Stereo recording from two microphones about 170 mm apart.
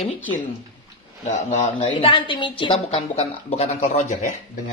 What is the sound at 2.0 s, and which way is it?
A woman's voice, 30° left (ahead or behind).